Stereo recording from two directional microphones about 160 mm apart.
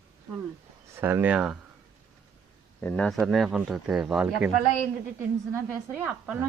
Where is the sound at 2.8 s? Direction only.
10° left (ahead or behind).